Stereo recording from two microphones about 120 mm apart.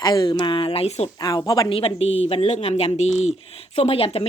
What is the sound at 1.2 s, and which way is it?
Speech, 35° left (ahead or behind).